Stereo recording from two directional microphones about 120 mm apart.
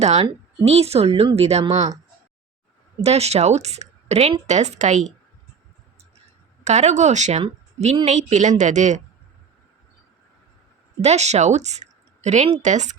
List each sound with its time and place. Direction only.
0.0 s speech: 70° right (ahead or behind)
3.0 s speech: 60° right (ahead or behind); by 5.1 s 80° right
6.7 s speech: 70° right (ahead or behind)
7.4 s a woman's voice: 65° right (ahead or behind)
8.0 s a woman's voice: 75° right (ahead or behind)
11.0 s a woman's voice: 65° right (ahead or behind)
12.6 s a woman's voice: 85° right